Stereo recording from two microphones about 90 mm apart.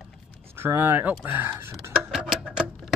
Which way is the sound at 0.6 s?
25° right (ahead or behind).